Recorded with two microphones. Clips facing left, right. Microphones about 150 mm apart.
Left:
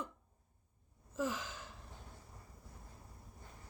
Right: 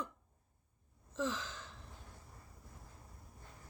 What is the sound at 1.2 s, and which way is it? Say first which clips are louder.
Gasp: even; 10° left (ahead or behind).